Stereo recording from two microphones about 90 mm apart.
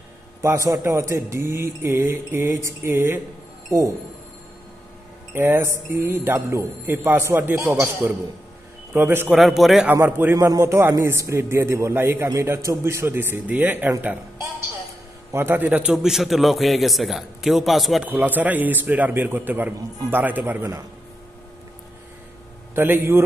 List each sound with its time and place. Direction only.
0.4 s speech: 35° right (ahead or behind)
5.3 s speech: 25° right (ahead or behind)
9.3 s a man's voice: 5° right (ahead or behind)
10.0 s speech: 25° right (ahead or behind)
10.3 s speech: 35° right (ahead or behind); by 13.9 s 20° right (ahead or behind)
15.3 s speech: 25° right (ahead or behind)
15.9 s a man's voice: 5° right (ahead or behind)
18.0 s speech: 20° right (ahead or behind)
22.8 s speech: 25° right (ahead or behind)